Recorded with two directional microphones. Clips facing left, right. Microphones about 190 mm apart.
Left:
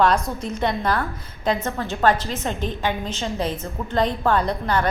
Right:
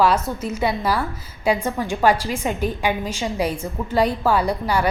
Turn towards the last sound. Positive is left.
turn(degrees=-10)  # may be behind; listen again after turning